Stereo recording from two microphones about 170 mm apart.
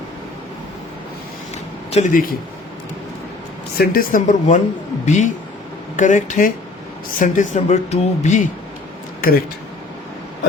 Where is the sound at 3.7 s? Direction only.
55° left (ahead or behind).